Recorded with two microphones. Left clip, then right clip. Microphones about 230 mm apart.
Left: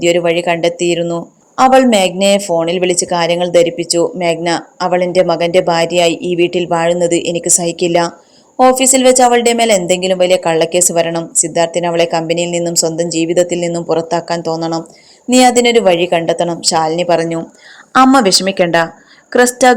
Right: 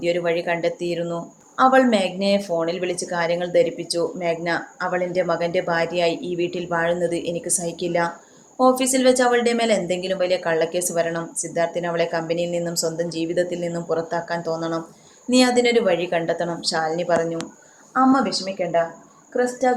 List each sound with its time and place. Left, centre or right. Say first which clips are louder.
0.0 s speech: left 10 dB; left